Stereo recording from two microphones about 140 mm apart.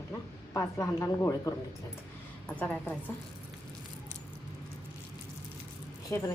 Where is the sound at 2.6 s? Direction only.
10° left (ahead or behind).